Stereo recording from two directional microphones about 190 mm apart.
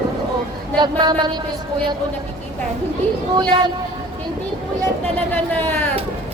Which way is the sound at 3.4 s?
20° right (ahead or behind).